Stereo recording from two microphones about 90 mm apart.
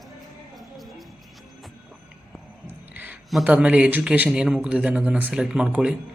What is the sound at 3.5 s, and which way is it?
Speech, 15° right (ahead or behind).